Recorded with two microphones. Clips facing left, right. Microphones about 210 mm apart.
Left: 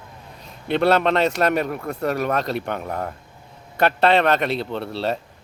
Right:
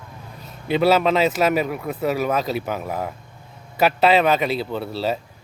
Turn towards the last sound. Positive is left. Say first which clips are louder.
# right 1 dB
turn(degrees=0)  # may be behind; listen again after turning